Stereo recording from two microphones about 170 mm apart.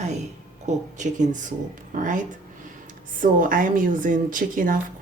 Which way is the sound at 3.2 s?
55° right (ahead or behind).